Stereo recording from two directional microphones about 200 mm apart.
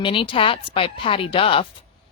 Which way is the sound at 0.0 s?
25° left (ahead or behind).